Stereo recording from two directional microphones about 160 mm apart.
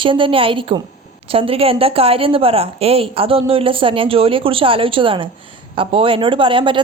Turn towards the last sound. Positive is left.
turn(degrees=-30)  # may be behind; listen again after turning